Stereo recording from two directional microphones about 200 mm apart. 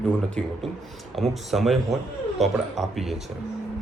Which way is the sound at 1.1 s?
Centre (ahead or behind).